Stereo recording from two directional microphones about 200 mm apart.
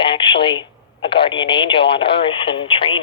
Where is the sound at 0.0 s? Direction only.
25° left (ahead or behind).